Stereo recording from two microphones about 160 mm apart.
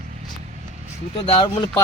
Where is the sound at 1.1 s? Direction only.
35° left (ahead or behind).